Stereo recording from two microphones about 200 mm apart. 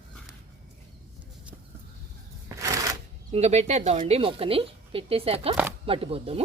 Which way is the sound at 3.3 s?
35° right (ahead or behind).